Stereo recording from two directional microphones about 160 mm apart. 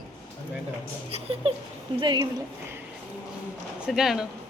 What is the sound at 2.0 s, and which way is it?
Speech, 30° right (ahead or behind).